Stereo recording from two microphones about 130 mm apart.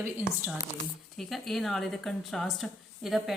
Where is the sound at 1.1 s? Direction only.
Centre (ahead or behind).